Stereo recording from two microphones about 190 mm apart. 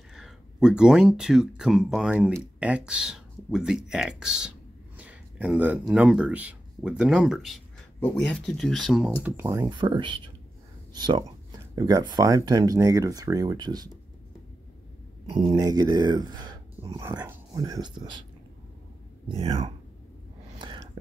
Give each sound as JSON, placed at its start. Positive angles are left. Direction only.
{"t": 0.1, "sound": "speech", "side_deg": -5}
{"t": 9.2, "sound": "speech", "side_deg": -15}
{"t": 15.3, "sound": "speech", "side_deg": -25}
{"t": 19.2, "sound": "speech", "side_deg": -25}
{"t": 20.5, "sound": "a sound", "side_deg": -25}